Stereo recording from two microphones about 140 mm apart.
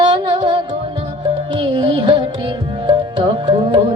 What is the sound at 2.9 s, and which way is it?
Music, 35° right (ahead or behind).